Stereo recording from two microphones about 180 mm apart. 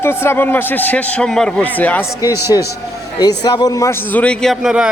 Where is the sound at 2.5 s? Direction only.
20° left (ahead or behind).